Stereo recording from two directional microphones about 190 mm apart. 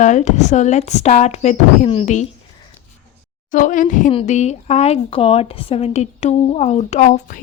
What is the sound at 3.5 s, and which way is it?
Speech, 40° left (ahead or behind).